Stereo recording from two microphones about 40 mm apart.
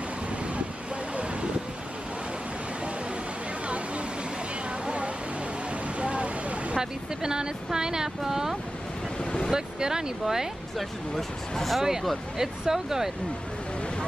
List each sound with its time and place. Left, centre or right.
1.1 s vehicle: right
3.6 s vehicle: right
5.7 s a sound: right
6.8 s speech: centre
10.8 s speech: centre
12.4 s speech: centre